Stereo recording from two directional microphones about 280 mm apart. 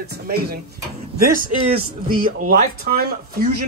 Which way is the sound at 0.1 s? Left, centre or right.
Right.